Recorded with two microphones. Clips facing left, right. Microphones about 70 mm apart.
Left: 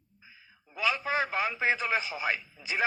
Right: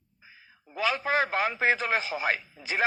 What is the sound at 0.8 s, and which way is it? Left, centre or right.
Speech, right.